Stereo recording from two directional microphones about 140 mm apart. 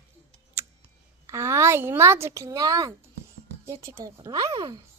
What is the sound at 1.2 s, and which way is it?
A child's voice, 20° right (ahead or behind).